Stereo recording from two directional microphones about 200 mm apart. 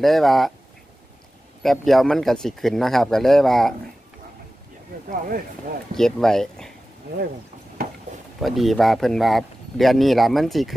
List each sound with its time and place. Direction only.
0.0 s speech: centre (ahead or behind)
1.6 s speech: centre (ahead or behind)
4.9 s speech: 45° right (ahead or behind)
5.9 s speech: centre (ahead or behind)
7.8 s a sound: 50° right (ahead or behind)
8.4 s speech: centre (ahead or behind)